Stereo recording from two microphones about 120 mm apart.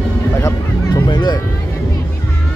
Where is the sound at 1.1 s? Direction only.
40° left (ahead or behind).